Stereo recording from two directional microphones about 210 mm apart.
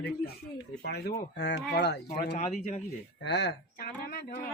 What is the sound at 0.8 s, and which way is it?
Speech, 55° left (ahead or behind).